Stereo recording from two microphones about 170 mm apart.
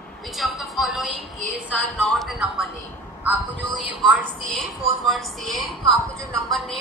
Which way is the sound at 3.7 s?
Centre (ahead or behind).